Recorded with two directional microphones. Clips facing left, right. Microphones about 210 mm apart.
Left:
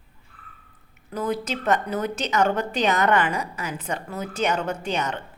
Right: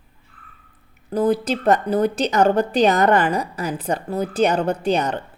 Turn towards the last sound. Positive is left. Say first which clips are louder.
# right 7 dB
turn(degrees=-35)  # may be behind; listen again after turning